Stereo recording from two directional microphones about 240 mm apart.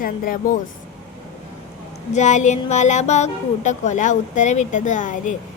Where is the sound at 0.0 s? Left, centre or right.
Left.